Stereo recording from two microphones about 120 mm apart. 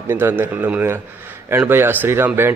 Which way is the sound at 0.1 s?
15° right (ahead or behind).